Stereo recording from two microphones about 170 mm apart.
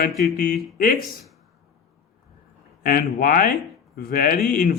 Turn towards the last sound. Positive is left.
turn(degrees=60)  # may be behind; listen again after turning